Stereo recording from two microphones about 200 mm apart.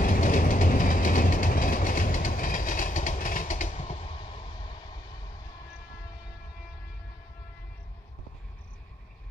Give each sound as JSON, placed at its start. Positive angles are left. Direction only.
{"t": 0.0, "sound": "train", "side_deg": 40}